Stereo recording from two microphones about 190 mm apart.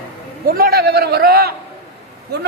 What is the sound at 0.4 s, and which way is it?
A man's voice, 50° right (ahead or behind).